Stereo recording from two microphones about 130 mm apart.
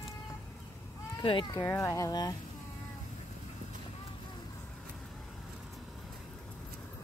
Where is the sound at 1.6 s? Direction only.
20° left (ahead or behind).